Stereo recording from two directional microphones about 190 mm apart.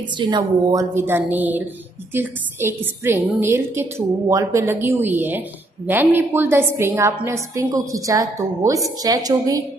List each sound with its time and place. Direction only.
0.2 s a woman's voice: 20° right (ahead or behind)